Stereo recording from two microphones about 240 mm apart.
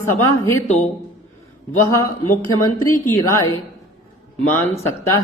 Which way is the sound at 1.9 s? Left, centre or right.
Centre.